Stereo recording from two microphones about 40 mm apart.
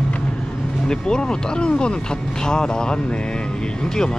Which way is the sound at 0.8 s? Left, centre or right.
Centre.